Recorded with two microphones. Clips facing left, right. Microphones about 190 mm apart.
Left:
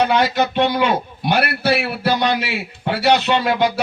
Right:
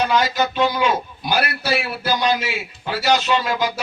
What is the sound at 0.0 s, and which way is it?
A man's voice, 60° left (ahead or behind).